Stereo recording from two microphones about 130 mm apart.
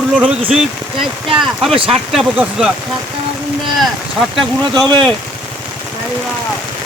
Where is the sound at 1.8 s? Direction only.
45° right (ahead or behind).